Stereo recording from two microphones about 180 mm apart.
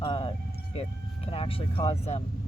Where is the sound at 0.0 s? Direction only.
30° left (ahead or behind).